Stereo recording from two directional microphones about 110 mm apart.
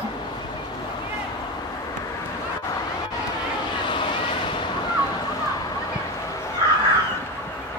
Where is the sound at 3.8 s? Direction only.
45° left (ahead or behind).